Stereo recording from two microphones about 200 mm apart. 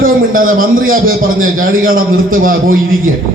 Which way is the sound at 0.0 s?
45° right (ahead or behind).